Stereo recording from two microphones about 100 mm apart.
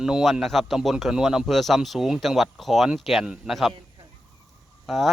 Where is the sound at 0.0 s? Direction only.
5° right (ahead or behind).